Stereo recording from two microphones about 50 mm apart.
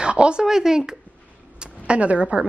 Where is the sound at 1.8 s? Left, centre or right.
Right.